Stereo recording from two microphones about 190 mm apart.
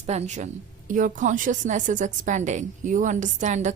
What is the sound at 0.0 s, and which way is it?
A woman's voice, 35° right (ahead or behind).